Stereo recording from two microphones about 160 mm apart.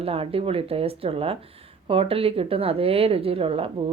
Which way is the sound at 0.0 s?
35° right (ahead or behind).